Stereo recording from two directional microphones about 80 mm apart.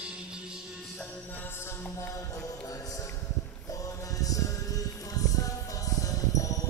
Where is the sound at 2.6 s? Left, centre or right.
Left.